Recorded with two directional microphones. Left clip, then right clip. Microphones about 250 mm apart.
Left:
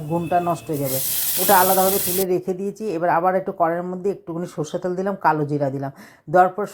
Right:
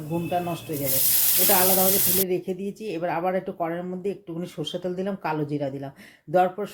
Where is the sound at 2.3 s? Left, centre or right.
Centre.